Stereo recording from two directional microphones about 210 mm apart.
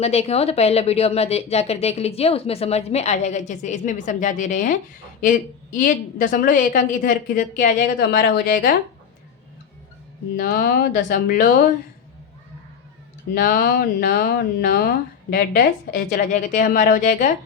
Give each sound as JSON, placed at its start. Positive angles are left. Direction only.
{"t": 0.0, "sound": "a woman's voice", "side_deg": 30}
{"t": 10.3, "sound": "speech", "side_deg": 45}
{"t": 13.3, "sound": "speech", "side_deg": 45}